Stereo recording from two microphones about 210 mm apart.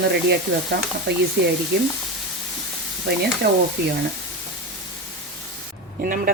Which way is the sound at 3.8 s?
50° right (ahead or behind).